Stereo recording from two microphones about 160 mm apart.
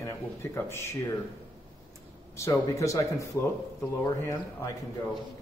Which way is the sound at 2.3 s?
20° left (ahead or behind).